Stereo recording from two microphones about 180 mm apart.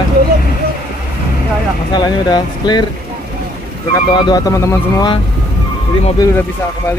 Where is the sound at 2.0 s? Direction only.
25° left (ahead or behind).